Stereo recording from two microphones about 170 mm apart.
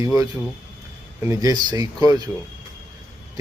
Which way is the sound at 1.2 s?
20° right (ahead or behind).